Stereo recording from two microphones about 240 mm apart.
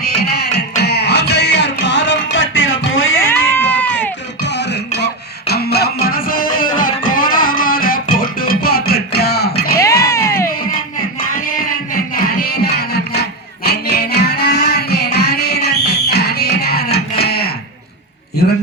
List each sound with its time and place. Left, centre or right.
0.2 s music: left
3.2 s cat: centre
4.4 s music: left
10.0 s music: centre
11.3 s a sound: left
12.1 s music: left
18.4 s a sound: left